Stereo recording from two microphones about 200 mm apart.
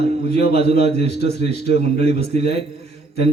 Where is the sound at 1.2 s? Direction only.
55° left (ahead or behind).